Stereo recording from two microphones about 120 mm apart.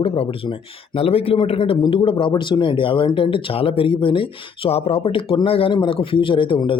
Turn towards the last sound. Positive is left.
turn(degrees=45)  # may be behind; listen again after turning